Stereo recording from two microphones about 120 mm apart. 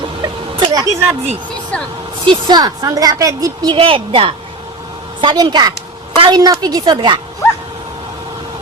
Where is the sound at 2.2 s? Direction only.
40° right (ahead or behind).